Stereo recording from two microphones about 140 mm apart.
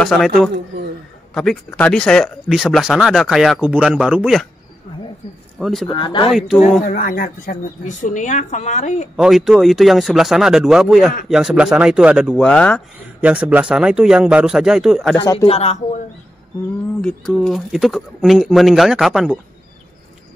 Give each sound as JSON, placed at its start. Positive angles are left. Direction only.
{"t": 0.0, "sound": "speech", "side_deg": 5}
{"t": 1.3, "sound": "speech", "side_deg": 5}
{"t": 5.6, "sound": "speech", "side_deg": 0}
{"t": 5.9, "sound": "speech", "side_deg": 35}
{"t": 6.3, "sound": "speech", "side_deg": 0}
{"t": 6.9, "sound": "a woman's voice", "side_deg": 90}
{"t": 9.1, "sound": "speech", "side_deg": -5}
{"t": 12.4, "sound": "speech", "side_deg": 5}
{"t": 13.2, "sound": "speech", "side_deg": -10}
{"t": 15.3, "sound": "a man's voice", "side_deg": 45}
{"t": 17.0, "sound": "speech", "side_deg": 0}